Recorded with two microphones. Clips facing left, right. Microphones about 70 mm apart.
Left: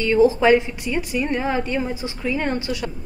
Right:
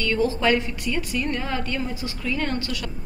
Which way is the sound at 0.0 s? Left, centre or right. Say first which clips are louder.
Left 6 dB; centre.